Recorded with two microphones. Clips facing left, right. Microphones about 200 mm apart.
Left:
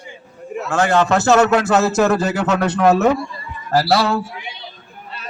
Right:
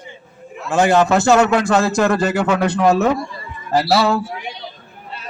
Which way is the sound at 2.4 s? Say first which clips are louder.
Right 1 dB; 10° right (ahead or behind).